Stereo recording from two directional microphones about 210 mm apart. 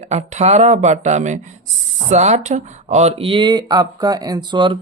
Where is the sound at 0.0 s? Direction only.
35° right (ahead or behind).